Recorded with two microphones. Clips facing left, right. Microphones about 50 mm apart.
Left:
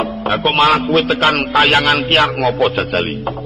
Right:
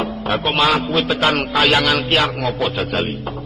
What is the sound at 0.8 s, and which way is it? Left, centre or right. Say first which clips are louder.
A man's voice: left 4 dB; left.